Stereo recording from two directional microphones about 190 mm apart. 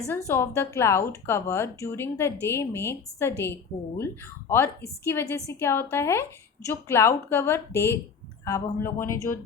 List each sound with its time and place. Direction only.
0.3 s a woman's voice: 10° left (ahead or behind)